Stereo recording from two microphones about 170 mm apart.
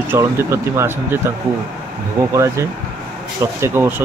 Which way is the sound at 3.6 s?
15° right (ahead or behind).